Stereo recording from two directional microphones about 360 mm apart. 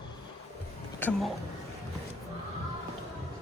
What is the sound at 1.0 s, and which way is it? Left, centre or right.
Speech, centre.